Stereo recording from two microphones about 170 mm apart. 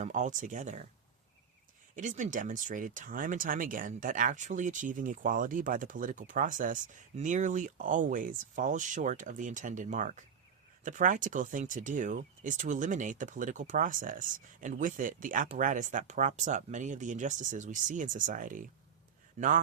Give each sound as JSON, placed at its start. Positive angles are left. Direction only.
{"t": 0.0, "sound": "speech", "side_deg": -45}
{"t": 2.0, "sound": "speech", "side_deg": -45}